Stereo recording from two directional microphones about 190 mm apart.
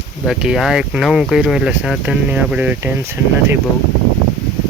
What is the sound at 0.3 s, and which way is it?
Speech, 5° right (ahead or behind).